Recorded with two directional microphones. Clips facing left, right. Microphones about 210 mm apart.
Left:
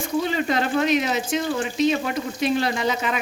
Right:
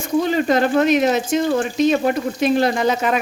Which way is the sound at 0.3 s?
45° right (ahead or behind).